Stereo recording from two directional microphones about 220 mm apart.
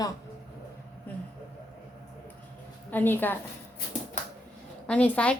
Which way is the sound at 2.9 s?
10° left (ahead or behind).